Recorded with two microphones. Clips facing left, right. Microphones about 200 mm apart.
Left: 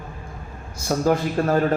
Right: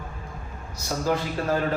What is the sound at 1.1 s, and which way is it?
Speech, 50° left (ahead or behind).